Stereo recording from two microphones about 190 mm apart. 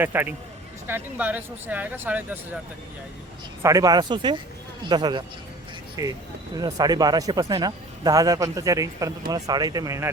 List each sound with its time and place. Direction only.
0.0 s speech: 10° right (ahead or behind)
3.6 s speech: 15° right (ahead or behind)